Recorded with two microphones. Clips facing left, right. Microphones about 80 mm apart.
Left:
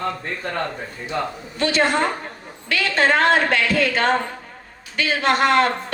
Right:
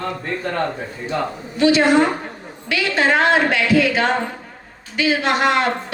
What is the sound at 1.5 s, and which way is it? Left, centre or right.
Speech, left.